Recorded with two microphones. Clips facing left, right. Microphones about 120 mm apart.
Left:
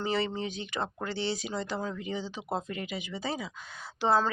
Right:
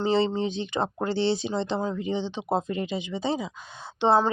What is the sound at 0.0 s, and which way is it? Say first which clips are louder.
Speech: right 7 dB; 25° right (ahead or behind).